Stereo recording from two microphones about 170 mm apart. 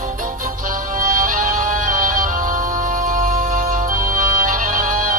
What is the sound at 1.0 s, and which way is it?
Music, 50° right (ahead or behind).